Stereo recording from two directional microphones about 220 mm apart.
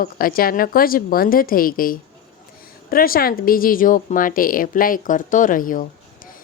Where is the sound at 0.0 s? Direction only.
40° left (ahead or behind).